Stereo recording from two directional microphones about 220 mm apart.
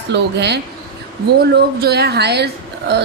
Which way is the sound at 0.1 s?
50° right (ahead or behind).